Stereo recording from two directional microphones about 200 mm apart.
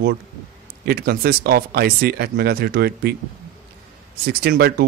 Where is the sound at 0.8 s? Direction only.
50° right (ahead or behind).